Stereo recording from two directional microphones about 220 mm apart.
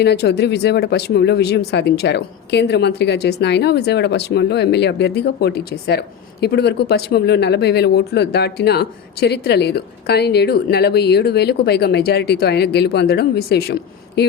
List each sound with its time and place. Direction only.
0.0 s speech: 50° left (ahead or behind)